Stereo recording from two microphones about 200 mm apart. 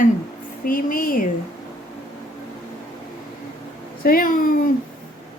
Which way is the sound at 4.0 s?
45° left (ahead or behind).